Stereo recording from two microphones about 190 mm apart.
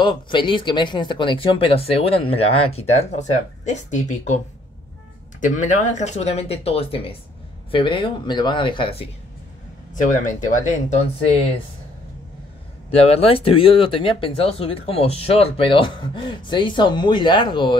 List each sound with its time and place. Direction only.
0.0 s speech: 25° left (ahead or behind)
5.4 s speech: 40° left (ahead or behind)
9.9 s speech: 45° left (ahead or behind)
12.9 s speech: 30° left (ahead or behind)